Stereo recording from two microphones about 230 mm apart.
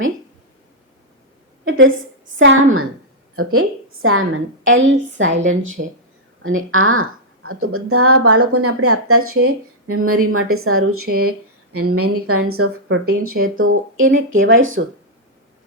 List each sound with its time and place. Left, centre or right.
1.6 s a sound: right
2.4 s a woman's voice: right
3.3 s a woman's voice: right
6.4 s a woman's voice: right